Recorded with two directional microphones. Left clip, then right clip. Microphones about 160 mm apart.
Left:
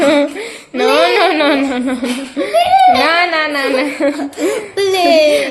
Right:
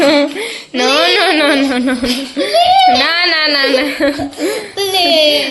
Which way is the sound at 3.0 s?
10° right (ahead or behind).